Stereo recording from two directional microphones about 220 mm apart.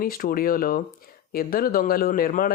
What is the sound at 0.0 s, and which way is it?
Speech, 40° left (ahead or behind).